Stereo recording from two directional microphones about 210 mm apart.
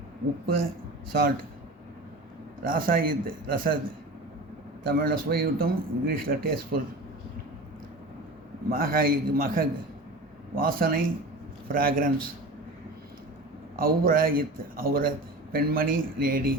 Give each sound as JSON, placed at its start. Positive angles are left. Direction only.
{"t": 0.4, "sound": "speech", "side_deg": -45}
{"t": 2.6, "sound": "speech", "side_deg": -45}
{"t": 4.8, "sound": "speech", "side_deg": -45}
{"t": 8.7, "sound": "speech", "side_deg": -45}
{"t": 13.7, "sound": "speech", "side_deg": -45}